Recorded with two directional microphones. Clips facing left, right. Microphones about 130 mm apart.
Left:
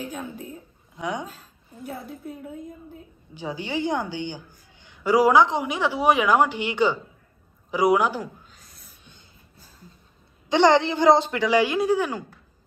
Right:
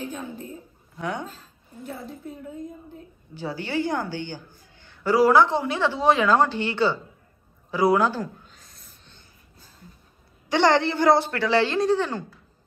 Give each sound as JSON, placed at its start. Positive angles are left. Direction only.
{"t": 0.0, "sound": "a woman's voice", "side_deg": 10}
{"t": 3.3, "sound": "a woman's voice", "side_deg": 15}
{"t": 8.5, "sound": "a sound", "side_deg": 0}
{"t": 10.5, "sound": "a woman's voice", "side_deg": 20}